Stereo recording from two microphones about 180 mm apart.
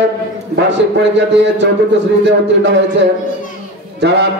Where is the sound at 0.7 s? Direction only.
80° right.